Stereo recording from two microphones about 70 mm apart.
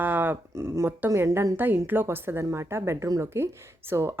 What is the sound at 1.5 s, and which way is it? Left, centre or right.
A woman's voice, right.